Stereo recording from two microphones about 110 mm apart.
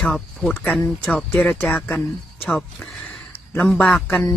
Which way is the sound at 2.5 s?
5° left (ahead or behind).